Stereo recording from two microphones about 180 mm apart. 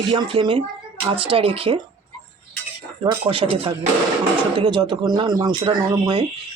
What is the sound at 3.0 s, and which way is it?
Speech, 30° right (ahead or behind).